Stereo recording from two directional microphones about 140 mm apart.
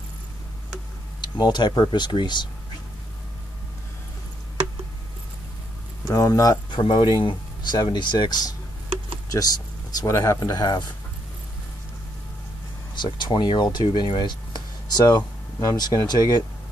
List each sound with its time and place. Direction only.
1.2 s speech: 30° left (ahead or behind)
6.0 s speech: 25° left (ahead or behind)
9.9 s speech: 25° left (ahead or behind)
12.9 s speech: 35° left (ahead or behind)